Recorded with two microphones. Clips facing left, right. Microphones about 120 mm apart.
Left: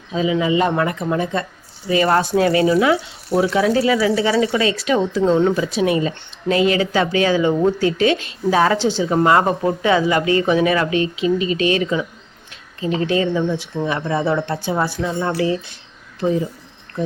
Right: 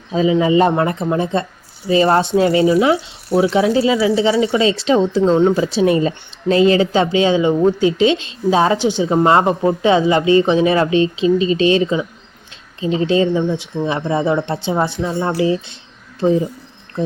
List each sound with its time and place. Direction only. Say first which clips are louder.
0.1 s speech: right 4 dB; 35° right (ahead or behind)
3.2 s speech: right 3 dB; 5° right (ahead or behind)
3.8 s speech: right 2 dB; 20° right (ahead or behind)